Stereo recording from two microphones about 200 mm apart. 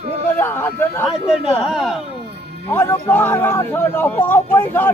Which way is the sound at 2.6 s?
10° left (ahead or behind).